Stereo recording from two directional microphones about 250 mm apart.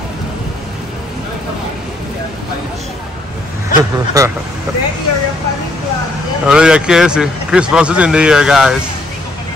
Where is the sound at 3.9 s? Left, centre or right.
Centre.